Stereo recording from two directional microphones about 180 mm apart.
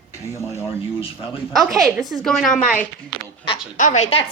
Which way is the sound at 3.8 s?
40° left (ahead or behind).